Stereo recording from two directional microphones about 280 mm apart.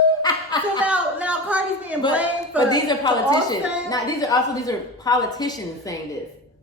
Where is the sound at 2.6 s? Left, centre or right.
Centre.